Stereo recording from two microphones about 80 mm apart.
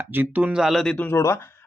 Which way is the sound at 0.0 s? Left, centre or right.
Right.